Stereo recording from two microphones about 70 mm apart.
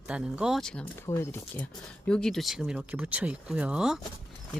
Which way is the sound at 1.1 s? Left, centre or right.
Left.